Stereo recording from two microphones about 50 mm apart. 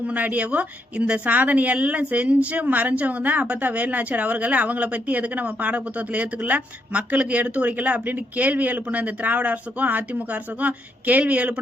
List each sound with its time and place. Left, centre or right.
0.1 s a woman's voice: right